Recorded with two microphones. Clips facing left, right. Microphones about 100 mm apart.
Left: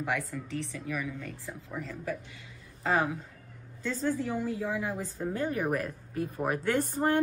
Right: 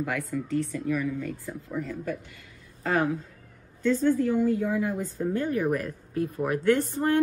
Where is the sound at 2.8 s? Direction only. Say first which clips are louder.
Right 2 dB; 15° left (ahead or behind).